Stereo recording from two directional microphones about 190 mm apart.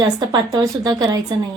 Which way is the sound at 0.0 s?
20° right (ahead or behind).